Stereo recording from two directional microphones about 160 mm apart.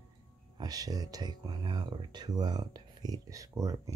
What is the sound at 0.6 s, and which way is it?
Speech, 25° right (ahead or behind).